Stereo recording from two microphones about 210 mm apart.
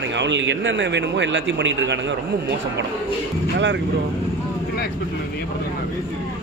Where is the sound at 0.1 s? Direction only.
60° right (ahead or behind).